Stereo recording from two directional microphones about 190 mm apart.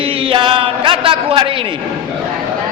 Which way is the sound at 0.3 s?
25° right (ahead or behind).